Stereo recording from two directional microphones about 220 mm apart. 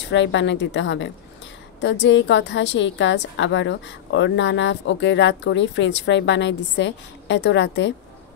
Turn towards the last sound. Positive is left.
turn(degrees=55)  # may be behind; listen again after turning